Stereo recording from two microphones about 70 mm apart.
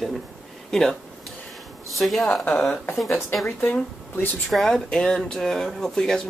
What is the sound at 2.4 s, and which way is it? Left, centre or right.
Speech, left.